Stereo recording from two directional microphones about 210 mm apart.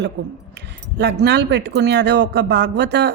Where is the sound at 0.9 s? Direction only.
50° right (ahead or behind).